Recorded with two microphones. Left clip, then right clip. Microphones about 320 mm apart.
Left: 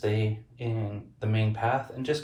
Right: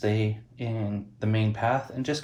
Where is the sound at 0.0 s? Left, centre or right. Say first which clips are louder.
Right 2 dB; right.